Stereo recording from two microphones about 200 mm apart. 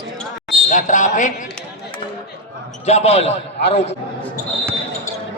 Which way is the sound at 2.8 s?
30° left (ahead or behind).